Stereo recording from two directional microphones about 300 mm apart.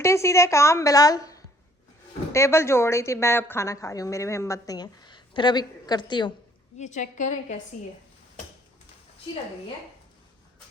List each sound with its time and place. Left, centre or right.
0.0 s a woman's voice: centre; by 7.6 s left